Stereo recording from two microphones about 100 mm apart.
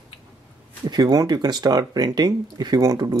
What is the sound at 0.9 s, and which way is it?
Speech, 40° right (ahead or behind).